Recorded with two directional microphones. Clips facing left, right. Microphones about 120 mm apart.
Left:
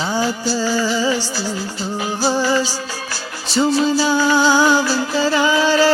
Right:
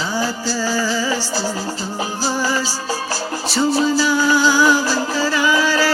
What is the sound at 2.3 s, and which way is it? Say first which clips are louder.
Music: left 3 dB; 25° left (ahead or behind).